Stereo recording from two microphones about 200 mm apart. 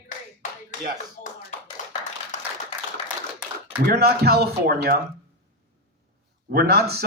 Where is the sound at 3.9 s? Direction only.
50° right (ahead or behind).